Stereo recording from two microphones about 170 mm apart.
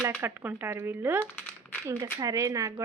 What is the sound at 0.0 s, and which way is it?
Speech, 15° right (ahead or behind).